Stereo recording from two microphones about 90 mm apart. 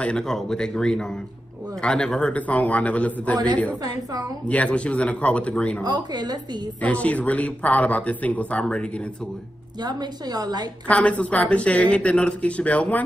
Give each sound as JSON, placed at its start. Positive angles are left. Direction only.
{"t": 0.0, "sound": "speech", "side_deg": 10}
{"t": 3.8, "sound": "a woman's voice", "side_deg": -45}
{"t": 4.5, "sound": "speech", "side_deg": 15}
{"t": 5.9, "sound": "a woman's voice", "side_deg": -50}
{"t": 6.8, "sound": "speech", "side_deg": 15}
{"t": 9.8, "sound": "a woman's voice", "side_deg": -50}
{"t": 10.9, "sound": "speech", "side_deg": 15}